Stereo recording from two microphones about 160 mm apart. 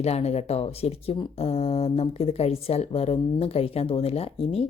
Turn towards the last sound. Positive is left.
turn(degrees=40)  # may be behind; listen again after turning